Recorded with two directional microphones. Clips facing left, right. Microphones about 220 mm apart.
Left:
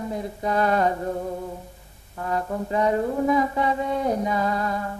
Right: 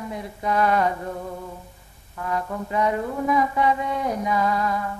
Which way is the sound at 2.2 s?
35° left (ahead or behind).